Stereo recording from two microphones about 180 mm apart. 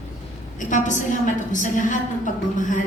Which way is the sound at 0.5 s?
45° left (ahead or behind).